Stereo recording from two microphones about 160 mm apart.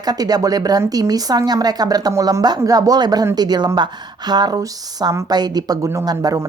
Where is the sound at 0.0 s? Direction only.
25° right (ahead or behind).